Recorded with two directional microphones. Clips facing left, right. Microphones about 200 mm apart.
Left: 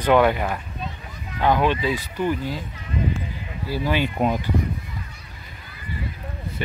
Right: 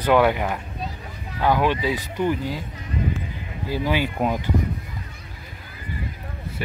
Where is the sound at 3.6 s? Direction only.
15° right (ahead or behind).